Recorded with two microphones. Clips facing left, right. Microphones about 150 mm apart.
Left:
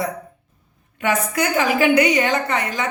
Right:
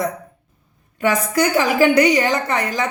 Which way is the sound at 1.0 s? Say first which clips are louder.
Right 3 dB; 35° right (ahead or behind).